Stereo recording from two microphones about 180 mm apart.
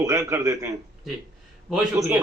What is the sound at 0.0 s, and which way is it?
Speech, 15° right (ahead or behind).